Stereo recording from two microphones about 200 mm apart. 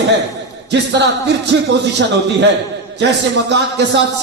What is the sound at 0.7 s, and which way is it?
A man's voice, 60° right (ahead or behind).